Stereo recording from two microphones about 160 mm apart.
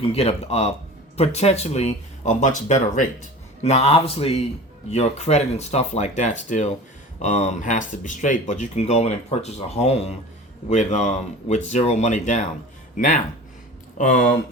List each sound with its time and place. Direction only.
0.0 s speech: 40° left (ahead or behind)